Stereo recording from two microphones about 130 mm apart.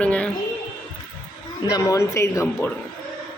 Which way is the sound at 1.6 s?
25° left (ahead or behind).